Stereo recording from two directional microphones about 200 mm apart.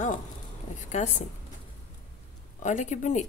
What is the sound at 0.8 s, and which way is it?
Speech, 35° left (ahead or behind).